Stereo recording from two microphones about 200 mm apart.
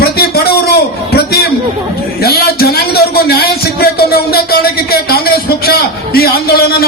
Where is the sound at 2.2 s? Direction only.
50° left (ahead or behind).